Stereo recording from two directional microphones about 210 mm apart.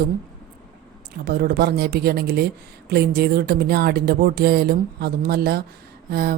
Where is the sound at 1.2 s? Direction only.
50° right (ahead or behind).